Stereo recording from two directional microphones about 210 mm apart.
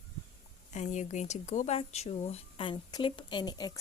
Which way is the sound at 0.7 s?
35° left (ahead or behind).